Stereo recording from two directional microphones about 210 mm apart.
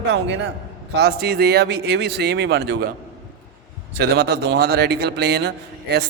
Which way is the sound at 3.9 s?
50° right (ahead or behind).